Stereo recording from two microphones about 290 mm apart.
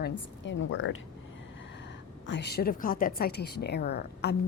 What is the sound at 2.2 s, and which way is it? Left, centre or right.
A woman's voice, left.